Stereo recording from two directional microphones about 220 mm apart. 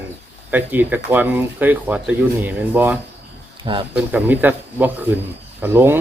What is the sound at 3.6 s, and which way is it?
Speech, 25° right (ahead or behind).